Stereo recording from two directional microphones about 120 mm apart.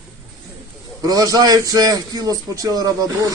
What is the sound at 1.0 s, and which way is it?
A man's voice, 30° right (ahead or behind).